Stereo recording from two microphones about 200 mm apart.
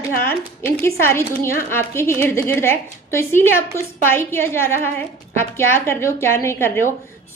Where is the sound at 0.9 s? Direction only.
15° left (ahead or behind).